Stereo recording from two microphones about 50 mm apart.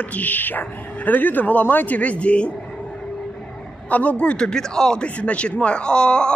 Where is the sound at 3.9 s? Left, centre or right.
Left.